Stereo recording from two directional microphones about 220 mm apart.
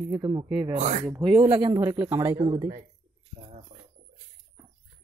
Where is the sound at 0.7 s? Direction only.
30° right (ahead or behind).